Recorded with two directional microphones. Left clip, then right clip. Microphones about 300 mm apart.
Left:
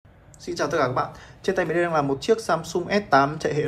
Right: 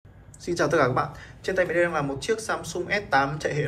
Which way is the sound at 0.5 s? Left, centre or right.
Centre.